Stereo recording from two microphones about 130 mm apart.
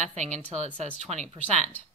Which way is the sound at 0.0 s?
65° right (ahead or behind).